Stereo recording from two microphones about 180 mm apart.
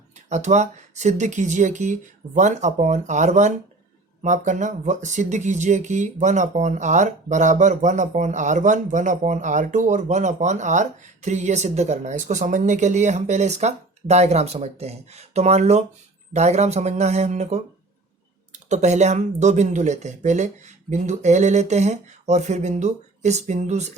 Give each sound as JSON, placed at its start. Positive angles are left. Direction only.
{"t": 0.3, "sound": "speech", "side_deg": -40}